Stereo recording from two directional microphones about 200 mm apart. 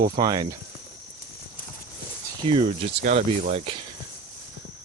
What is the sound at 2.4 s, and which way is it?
Speech, 25° right (ahead or behind).